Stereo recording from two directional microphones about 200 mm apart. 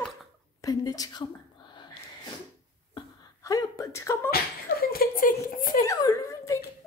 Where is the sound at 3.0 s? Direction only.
15° left (ahead or behind).